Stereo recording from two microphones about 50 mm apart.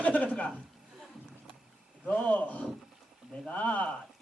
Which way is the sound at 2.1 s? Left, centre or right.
Left.